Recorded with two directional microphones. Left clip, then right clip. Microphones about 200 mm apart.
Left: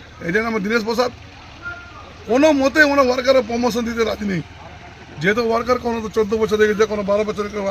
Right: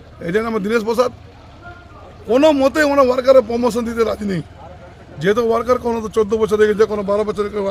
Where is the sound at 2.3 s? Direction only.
30° right (ahead or behind).